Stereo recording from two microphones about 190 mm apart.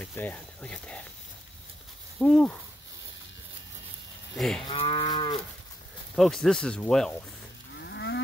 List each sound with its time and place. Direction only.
0.0 s speech: 10° left (ahead or behind)
2.1 s speech: 5° left (ahead or behind)
4.4 s speech: centre (ahead or behind)
4.6 s moo: 30° left (ahead or behind)
6.1 s speech: centre (ahead or behind)
7.7 s cattle: 65° left (ahead or behind)